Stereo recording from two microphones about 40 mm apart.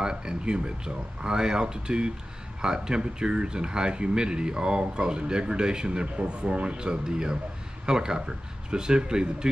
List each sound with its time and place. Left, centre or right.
0.0 s speech: centre